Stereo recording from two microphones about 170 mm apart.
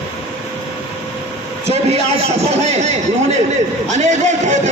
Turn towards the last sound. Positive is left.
turn(degrees=-45)  # may be behind; listen again after turning